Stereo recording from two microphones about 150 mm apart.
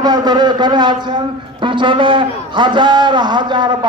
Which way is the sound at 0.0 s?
25° right (ahead or behind).